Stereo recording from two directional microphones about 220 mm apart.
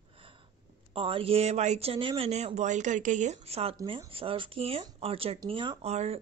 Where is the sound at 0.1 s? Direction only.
25° right (ahead or behind).